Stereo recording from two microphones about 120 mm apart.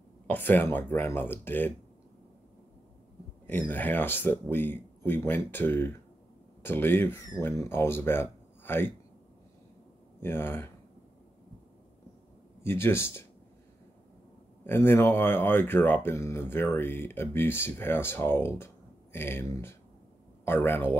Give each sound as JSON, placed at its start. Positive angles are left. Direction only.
{"t": 0.3, "sound": "speech", "side_deg": 15}
{"t": 3.4, "sound": "speech", "side_deg": 15}
{"t": 10.2, "sound": "speech", "side_deg": 20}
{"t": 12.6, "sound": "speech", "side_deg": 20}
{"t": 14.6, "sound": "speech", "side_deg": 20}